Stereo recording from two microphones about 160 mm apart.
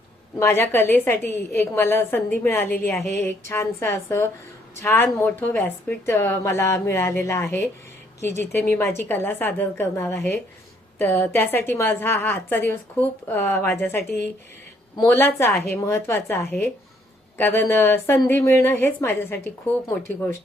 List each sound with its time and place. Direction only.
0.3 s speech: 15° left (ahead or behind)